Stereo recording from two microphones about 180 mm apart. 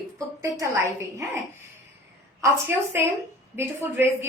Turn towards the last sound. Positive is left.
turn(degrees=-10)  # may be behind; listen again after turning